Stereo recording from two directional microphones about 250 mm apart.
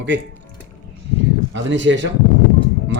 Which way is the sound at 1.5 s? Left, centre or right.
Right.